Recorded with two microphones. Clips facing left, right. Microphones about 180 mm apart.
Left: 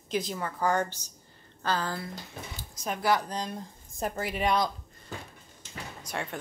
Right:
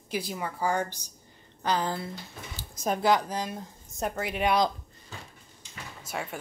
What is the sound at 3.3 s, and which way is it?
Speech, 5° right (ahead or behind).